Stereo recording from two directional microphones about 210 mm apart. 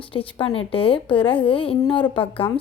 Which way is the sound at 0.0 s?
25° left (ahead or behind).